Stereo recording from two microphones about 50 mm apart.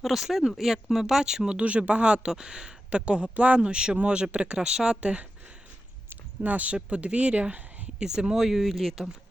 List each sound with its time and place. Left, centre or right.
0.0 s speech: centre
1.5 s speech: right
6.4 s speech: right
7.9 s speech: centre